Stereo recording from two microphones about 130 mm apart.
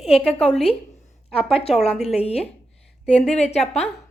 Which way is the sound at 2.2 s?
50° left (ahead or behind).